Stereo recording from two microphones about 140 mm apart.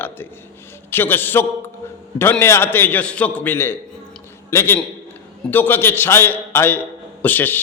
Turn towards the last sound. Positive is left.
turn(degrees=15)  # may be behind; listen again after turning